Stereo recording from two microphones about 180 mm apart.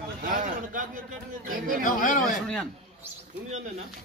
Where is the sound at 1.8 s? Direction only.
50° left (ahead or behind).